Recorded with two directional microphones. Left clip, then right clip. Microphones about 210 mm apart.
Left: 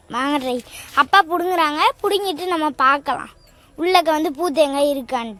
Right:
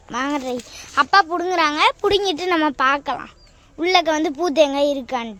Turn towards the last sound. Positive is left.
turn(degrees=0)  # may be behind; listen again after turning